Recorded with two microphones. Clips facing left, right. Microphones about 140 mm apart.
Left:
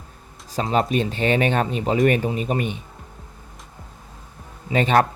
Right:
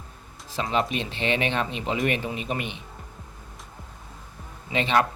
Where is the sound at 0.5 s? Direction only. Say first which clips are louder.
Left 5 dB; 40° left (ahead or behind).